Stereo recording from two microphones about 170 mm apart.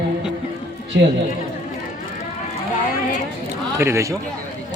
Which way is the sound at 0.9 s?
90° right.